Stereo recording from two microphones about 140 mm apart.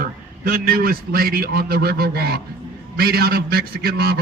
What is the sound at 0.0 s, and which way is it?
A man's voice, 90° right.